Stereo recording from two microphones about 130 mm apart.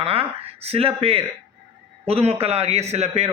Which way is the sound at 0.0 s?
50° right (ahead or behind).